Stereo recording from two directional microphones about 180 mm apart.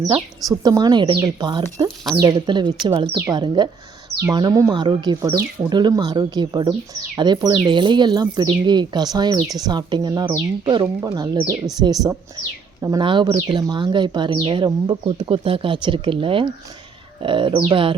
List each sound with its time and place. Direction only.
0.0 s speech: 20° right (ahead or behind)